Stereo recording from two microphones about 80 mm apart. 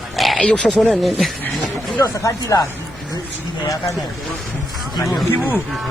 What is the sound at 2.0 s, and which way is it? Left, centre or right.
Speech, left.